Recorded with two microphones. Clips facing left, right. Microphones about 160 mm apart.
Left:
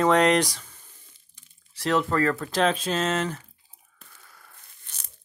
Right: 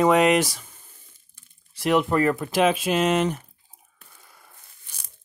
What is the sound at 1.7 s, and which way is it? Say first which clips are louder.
Speech: right 3 dB; 15° right (ahead or behind).